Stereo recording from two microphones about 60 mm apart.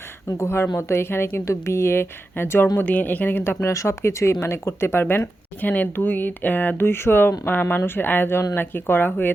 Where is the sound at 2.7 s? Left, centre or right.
Left.